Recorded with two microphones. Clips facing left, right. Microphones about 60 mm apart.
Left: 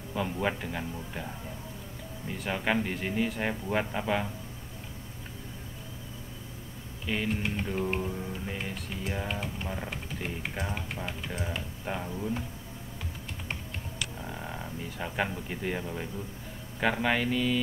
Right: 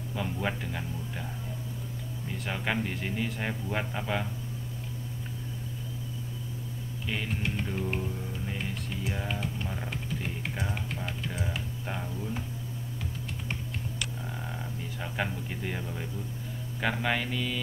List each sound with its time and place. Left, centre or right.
0.1 s speech: centre
7.1 s speech: centre
13.5 s a sound: centre
16.8 s speech: centre